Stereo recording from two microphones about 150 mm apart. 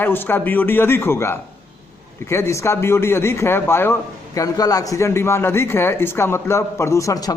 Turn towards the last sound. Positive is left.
turn(degrees=25)  # may be behind; listen again after turning